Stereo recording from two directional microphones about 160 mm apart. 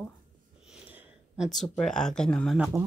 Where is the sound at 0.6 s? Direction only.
5° right (ahead or behind).